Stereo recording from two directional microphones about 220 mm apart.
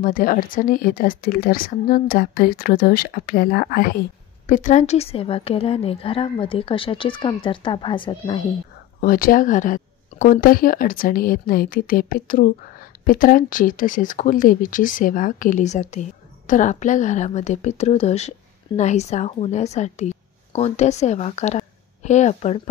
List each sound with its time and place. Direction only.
0.0 s a woman's voice: 40° left (ahead or behind); by 8.5 s 20° left (ahead or behind)
9.0 s a woman's voice: 40° left (ahead or behind)